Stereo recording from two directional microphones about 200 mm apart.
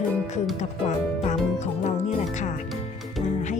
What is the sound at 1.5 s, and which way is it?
Speech, 35° left (ahead or behind).